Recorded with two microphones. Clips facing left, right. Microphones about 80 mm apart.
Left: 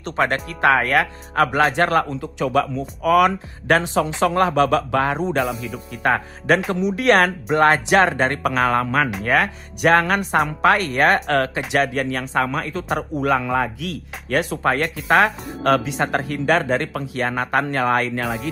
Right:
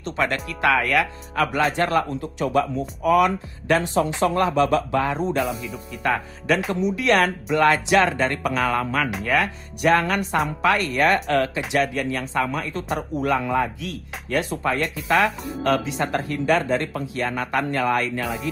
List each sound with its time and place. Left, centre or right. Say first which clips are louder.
0.0 s speech: left 3 dB; left
2.5 s speech: left 1 dB; left
8.4 s speech: left 3 dB; left
17.2 s speech: left 3 dB; left